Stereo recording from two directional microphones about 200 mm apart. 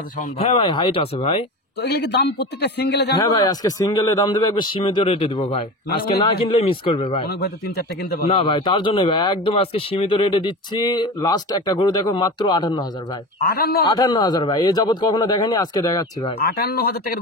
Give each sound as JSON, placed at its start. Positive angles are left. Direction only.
{"t": 0.4, "sound": "speech", "side_deg": 30}
{"t": 1.8, "sound": "a man's voice", "side_deg": 55}
{"t": 3.2, "sound": "speech", "side_deg": 20}
{"t": 7.2, "sound": "a man's voice", "side_deg": 55}
{"t": 8.3, "sound": "speech", "side_deg": 25}
{"t": 13.4, "sound": "a man's voice", "side_deg": 50}
{"t": 13.8, "sound": "speech", "side_deg": 20}
{"t": 16.3, "sound": "a man's voice", "side_deg": 50}